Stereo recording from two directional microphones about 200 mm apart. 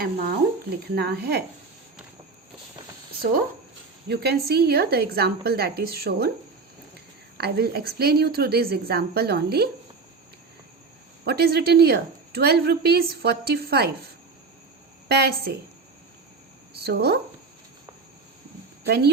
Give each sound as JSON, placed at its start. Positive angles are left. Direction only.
{"t": 0.0, "sound": "a woman's voice", "side_deg": -50}
{"t": 4.1, "sound": "a woman's voice", "side_deg": -55}
{"t": 7.3, "sound": "a woman's voice", "side_deg": -50}
{"t": 11.3, "sound": "a woman's voice", "side_deg": -50}
{"t": 15.1, "sound": "a woman's voice", "side_deg": -50}
{"t": 16.8, "sound": "a woman's voice", "side_deg": -55}
{"t": 18.9, "sound": "a woman's voice", "side_deg": -50}